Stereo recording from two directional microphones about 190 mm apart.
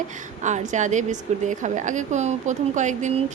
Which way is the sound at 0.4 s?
40° right (ahead or behind).